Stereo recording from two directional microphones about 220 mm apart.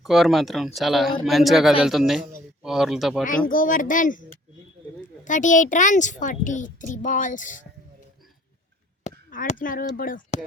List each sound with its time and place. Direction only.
0.0 s speech: centre (ahead or behind)
3.2 s a woman's voice: 40° left (ahead or behind)
9.0 s speech: 35° left (ahead or behind)